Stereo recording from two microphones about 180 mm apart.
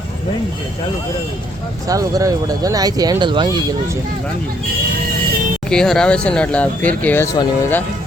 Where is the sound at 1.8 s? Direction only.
20° right (ahead or behind).